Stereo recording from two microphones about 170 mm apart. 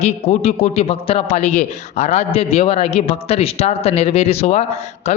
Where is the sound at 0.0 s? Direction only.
40° left (ahead or behind).